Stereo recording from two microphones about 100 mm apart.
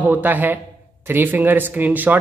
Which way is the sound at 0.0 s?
15° right (ahead or behind).